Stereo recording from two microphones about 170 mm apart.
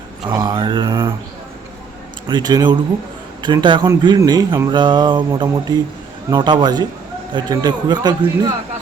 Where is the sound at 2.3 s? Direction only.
25° right (ahead or behind).